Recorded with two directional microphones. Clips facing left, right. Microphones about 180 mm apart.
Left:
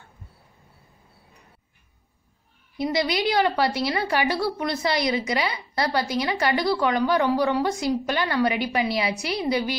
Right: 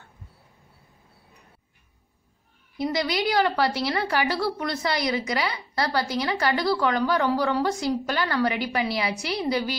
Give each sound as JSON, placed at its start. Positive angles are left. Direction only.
{"t": 2.8, "sound": "a woman's voice", "side_deg": 20}